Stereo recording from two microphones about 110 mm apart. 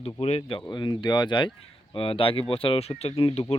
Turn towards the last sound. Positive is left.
turn(degrees=70)  # may be behind; listen again after turning